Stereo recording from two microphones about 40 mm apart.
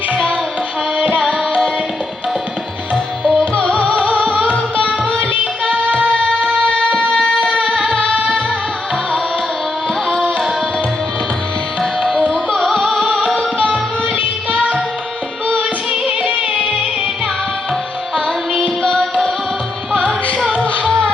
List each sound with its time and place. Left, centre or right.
3.2 s music: left
7.1 s music: left
11.8 s music: centre
16.0 s music: right
18.8 s music: left